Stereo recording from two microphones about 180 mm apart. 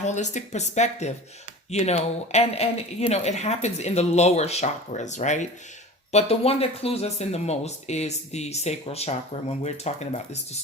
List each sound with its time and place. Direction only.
0.0 s speech: 40° left (ahead or behind)